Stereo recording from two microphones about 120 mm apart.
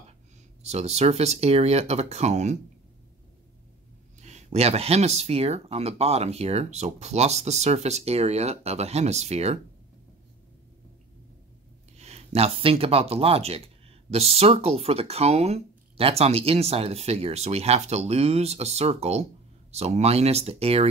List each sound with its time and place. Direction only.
0.6 s speech: 65° right (ahead or behind)
4.2 s speech: 70° right (ahead or behind)
12.0 s speech: 65° right (ahead or behind)